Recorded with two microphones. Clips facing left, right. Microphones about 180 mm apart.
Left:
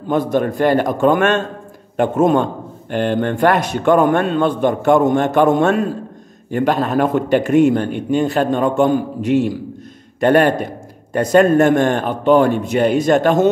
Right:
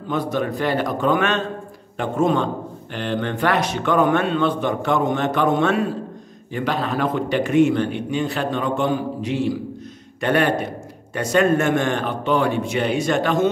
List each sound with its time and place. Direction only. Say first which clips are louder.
0.1 s a man's voice: left 6 dB; 50° left (ahead or behind)